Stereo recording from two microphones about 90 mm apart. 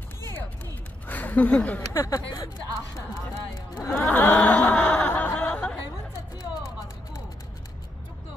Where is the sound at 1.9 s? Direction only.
35° left (ahead or behind).